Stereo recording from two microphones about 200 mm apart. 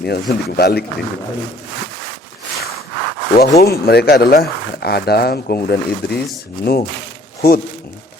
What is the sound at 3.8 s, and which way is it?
Speech, 50° left (ahead or behind).